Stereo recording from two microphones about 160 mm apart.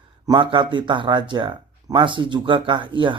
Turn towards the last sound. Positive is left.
turn(degrees=-30)  # may be behind; listen again after turning